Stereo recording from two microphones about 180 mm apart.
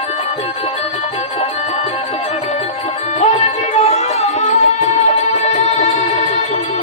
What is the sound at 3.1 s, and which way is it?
Music, 40° left (ahead or behind).